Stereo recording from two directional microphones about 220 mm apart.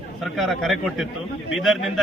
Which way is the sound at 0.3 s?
Centre (ahead or behind).